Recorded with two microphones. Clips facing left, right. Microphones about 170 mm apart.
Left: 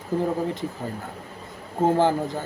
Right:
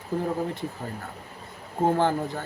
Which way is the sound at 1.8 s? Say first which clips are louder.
Left 3 dB; 15° left (ahead or behind).